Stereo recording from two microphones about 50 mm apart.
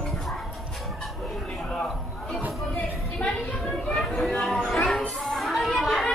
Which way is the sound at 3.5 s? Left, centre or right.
Centre.